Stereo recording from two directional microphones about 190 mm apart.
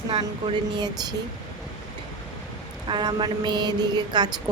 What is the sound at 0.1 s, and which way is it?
A woman's voice, 30° right (ahead or behind).